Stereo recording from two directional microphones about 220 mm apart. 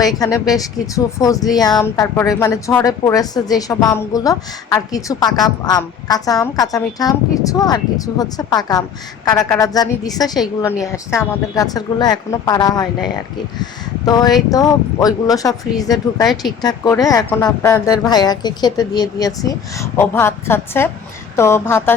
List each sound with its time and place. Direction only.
0.2 s speech: 15° left (ahead or behind)
14.0 s speech: 15° left (ahead or behind)